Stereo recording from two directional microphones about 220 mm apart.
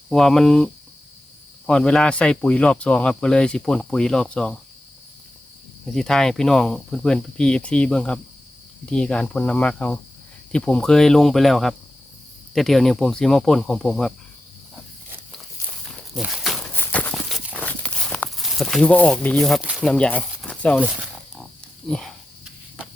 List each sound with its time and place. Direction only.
0.1 s speech: centre (ahead or behind)
5.8 s speech: centre (ahead or behind)
15.8 s horse: centre (ahead or behind)
20.8 s wild animals: 5° right (ahead or behind)
21.8 s speech: 5° left (ahead or behind)